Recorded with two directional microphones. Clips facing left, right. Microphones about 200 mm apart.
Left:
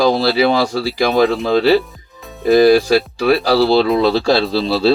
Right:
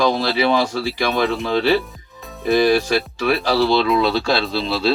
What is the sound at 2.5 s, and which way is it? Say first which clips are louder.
Speech: left 6 dB; 35° left (ahead or behind).